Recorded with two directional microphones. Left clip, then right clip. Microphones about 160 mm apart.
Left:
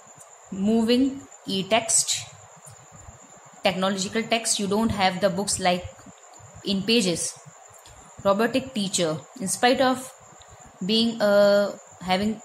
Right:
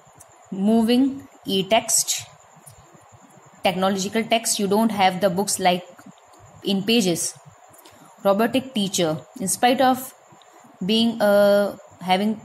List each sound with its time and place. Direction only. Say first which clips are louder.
0.6 s a woman's voice: right 2 dB; 10° right (ahead or behind)
3.6 s a woman's voice: right 3 dB; 10° right (ahead or behind)
8.2 s a woman's voice: right 2 dB; 10° right (ahead or behind)